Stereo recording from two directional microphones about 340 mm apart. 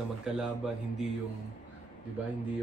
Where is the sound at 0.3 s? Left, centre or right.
Centre.